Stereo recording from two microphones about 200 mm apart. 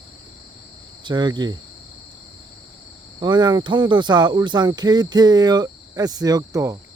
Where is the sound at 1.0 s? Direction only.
20° right (ahead or behind).